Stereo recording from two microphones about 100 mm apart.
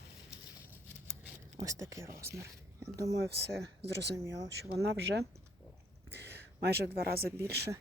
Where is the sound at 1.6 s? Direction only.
30° right (ahead or behind).